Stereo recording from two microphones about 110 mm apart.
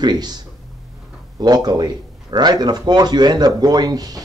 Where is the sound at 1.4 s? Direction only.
40° right (ahead or behind).